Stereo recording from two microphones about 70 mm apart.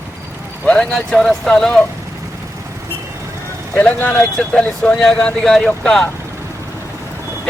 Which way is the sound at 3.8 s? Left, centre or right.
Left.